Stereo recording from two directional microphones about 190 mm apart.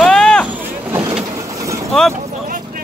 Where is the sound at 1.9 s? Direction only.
5° left (ahead or behind).